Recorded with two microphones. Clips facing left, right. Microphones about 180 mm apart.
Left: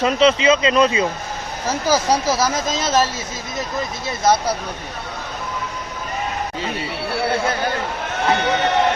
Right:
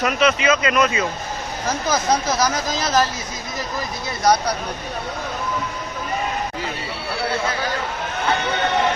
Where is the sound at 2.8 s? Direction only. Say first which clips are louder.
Left 1 dB; 25° left (ahead or behind).